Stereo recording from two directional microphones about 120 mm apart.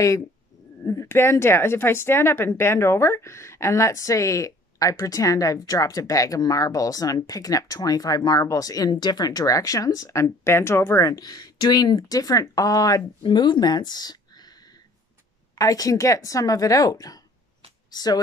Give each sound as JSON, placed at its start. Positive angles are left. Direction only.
{"t": 0.8, "sound": "speech", "side_deg": 20}
{"t": 15.5, "sound": "speech", "side_deg": 30}